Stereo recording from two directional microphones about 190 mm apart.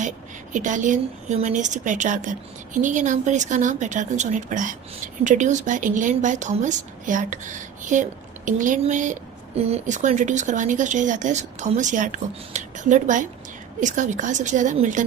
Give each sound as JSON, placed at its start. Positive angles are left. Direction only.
{"t": 0.5, "sound": "speech", "side_deg": -40}